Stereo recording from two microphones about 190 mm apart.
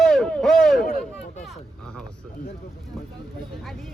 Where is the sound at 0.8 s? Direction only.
50° left (ahead or behind).